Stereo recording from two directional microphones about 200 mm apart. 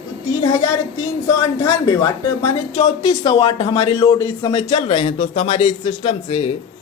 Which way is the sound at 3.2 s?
20° left (ahead or behind).